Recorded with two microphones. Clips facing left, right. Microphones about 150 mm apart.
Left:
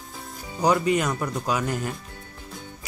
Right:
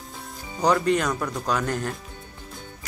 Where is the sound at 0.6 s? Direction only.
5° left (ahead or behind).